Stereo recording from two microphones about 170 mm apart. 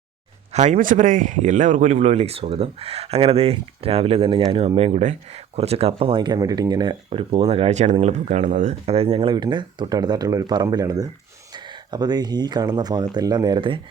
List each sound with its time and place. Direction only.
0.5 s speech: 45° right (ahead or behind); by 13.7 s 30° right (ahead or behind)